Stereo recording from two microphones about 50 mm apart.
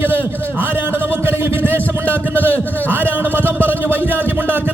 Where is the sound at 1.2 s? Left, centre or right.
Right.